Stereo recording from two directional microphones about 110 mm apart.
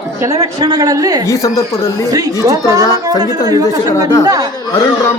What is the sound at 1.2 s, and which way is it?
Speech, 30° left (ahead or behind).